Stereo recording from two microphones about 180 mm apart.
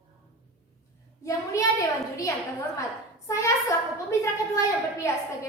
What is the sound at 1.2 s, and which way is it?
A child's voice, 15° left (ahead or behind).